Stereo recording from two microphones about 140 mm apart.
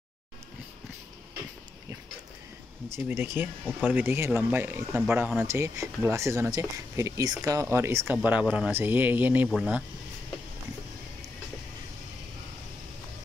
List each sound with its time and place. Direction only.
2.9 s speech: 20° right (ahead or behind)